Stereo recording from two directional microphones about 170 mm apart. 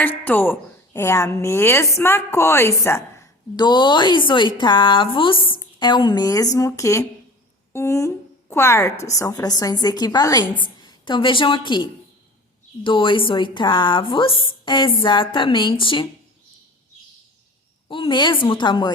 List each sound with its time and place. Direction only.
0.0 s a woman's voice: 10° left (ahead or behind); by 16.0 s 30° left (ahead or behind)
17.8 s a woman's voice: 30° left (ahead or behind)